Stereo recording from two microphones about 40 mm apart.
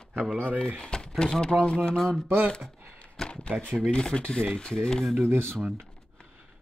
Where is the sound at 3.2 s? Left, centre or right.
Left.